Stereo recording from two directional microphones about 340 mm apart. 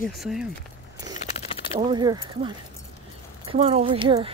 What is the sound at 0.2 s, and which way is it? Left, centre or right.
Speech, centre.